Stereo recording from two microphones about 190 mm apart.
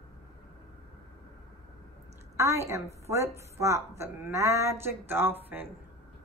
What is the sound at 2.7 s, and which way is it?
Speech, 15° right (ahead or behind).